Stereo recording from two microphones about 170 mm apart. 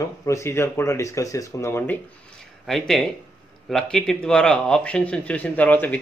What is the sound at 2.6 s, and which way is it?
Speech, centre (ahead or behind).